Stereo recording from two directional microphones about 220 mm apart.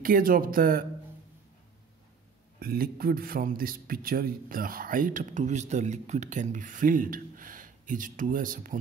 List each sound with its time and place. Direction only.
0.0 s a man's voice: 40° right (ahead or behind)
2.6 s a man's voice: 45° right (ahead or behind)